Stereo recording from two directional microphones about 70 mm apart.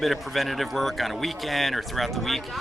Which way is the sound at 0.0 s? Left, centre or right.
Centre.